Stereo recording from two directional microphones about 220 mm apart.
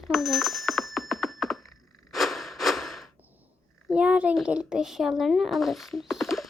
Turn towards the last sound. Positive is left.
turn(degrees=0)  # may be behind; listen again after turning